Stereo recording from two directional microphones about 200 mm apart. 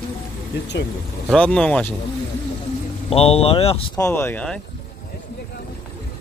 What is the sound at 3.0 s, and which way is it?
Speech, 30° left (ahead or behind).